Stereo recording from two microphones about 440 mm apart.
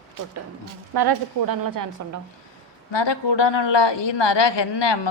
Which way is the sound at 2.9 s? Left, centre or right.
Left.